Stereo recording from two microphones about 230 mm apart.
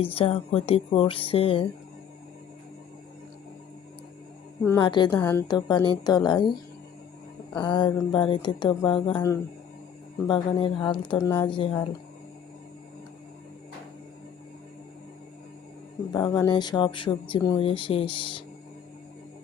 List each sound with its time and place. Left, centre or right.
0.0 s speech: left
4.8 s a woman's voice: centre
7.5 s a woman's voice: centre
11.5 s speech: left
16.1 s speech: centre